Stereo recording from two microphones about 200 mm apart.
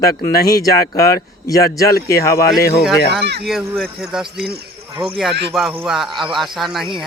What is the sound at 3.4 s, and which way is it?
Speech, centre (ahead or behind).